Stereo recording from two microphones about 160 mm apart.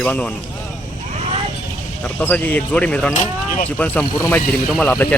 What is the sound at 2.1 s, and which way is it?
Speech, 10° left (ahead or behind).